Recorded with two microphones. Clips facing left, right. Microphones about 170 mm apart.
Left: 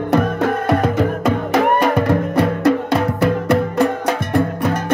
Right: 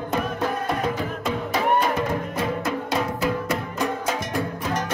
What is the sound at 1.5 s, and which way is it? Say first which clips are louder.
Music: left 5 dB; 70° left (ahead or behind).